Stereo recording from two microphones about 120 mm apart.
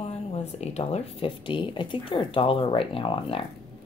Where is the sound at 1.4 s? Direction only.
45° left (ahead or behind).